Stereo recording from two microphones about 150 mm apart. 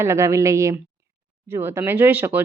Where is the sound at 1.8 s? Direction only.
15° right (ahead or behind).